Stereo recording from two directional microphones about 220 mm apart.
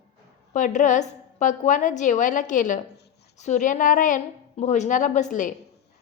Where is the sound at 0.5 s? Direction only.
35° left (ahead or behind).